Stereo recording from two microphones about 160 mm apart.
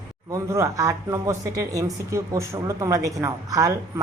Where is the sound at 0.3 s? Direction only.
20° right (ahead or behind).